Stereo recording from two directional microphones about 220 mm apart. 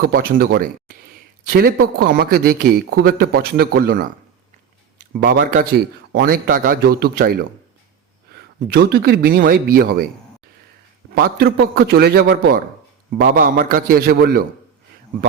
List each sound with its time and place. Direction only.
0.0 s a man's voice: 45° right (ahead or behind)
5.2 s a man's voice: 40° right (ahead or behind)
11.1 s a man's voice: 45° right (ahead or behind)